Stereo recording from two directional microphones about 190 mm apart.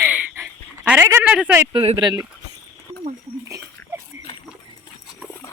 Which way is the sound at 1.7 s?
30° right (ahead or behind).